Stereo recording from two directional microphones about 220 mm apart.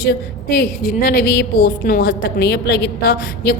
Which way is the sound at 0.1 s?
45° left (ahead or behind).